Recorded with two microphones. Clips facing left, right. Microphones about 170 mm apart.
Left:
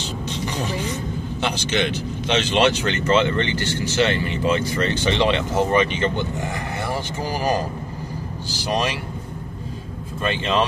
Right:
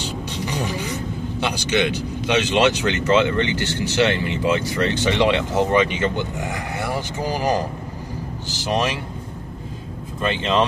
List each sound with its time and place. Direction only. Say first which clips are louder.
1.4 s speech: right 2 dB; 15° right (ahead or behind)
10.3 s speech: right 1 dB; 20° right (ahead or behind)